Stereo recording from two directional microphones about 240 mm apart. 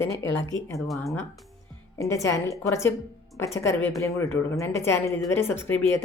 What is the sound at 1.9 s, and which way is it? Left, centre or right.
A woman's voice, centre.